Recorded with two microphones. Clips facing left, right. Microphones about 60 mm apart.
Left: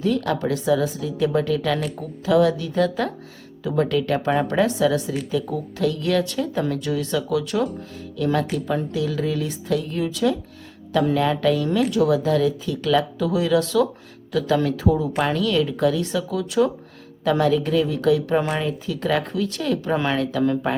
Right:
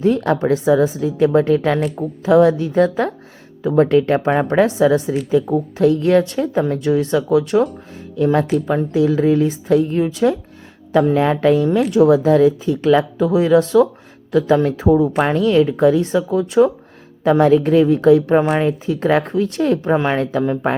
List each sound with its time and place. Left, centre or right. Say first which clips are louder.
0.0 s a woman's voice: right 6 dB; right
3.6 s speech: right 7 dB; right
3.8 s a woman's voice: right 7 dB; right